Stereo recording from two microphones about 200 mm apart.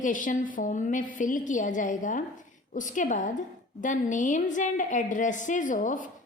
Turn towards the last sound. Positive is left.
turn(degrees=40)  # may be behind; listen again after turning